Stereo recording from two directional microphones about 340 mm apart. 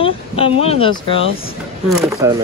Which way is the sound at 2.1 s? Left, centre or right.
Centre.